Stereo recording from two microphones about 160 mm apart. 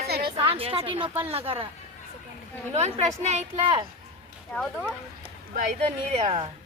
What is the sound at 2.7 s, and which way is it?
A woman's voice, 45° right (ahead or behind).